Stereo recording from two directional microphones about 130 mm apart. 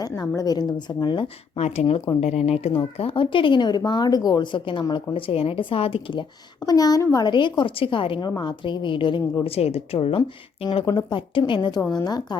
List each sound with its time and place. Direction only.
0.2 s a woman's voice: 30° left (ahead or behind)
1.5 s a woman's voice: 60° left (ahead or behind); by 7.3 s 25° left (ahead or behind)
7.3 s a woman's voice: 35° left (ahead or behind)